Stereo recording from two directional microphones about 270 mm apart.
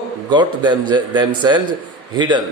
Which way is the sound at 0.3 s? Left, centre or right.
Centre.